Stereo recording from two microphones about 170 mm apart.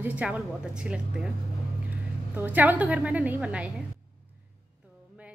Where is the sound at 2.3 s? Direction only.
10° right (ahead or behind).